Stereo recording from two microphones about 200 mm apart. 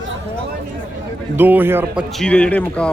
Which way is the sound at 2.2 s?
5° left (ahead or behind).